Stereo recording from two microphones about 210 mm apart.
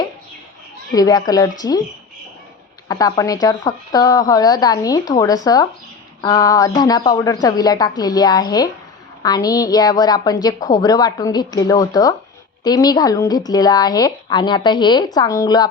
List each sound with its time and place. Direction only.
0.9 s a woman's voice: 20° left (ahead or behind)
2.9 s a woman's voice: 15° left (ahead or behind)